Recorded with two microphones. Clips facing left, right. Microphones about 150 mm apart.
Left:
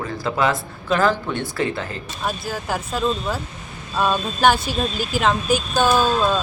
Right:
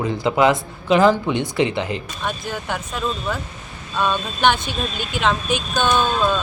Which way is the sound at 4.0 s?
10° left (ahead or behind).